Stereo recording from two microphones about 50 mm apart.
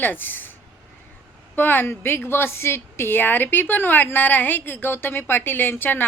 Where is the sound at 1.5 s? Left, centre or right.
Left.